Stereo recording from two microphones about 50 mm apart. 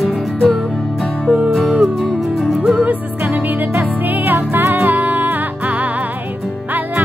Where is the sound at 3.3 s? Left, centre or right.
Right.